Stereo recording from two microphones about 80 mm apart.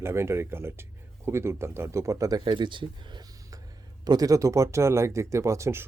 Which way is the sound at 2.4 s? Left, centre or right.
Right.